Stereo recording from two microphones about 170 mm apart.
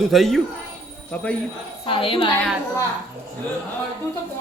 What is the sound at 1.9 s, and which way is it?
Speech, 30° left (ahead or behind).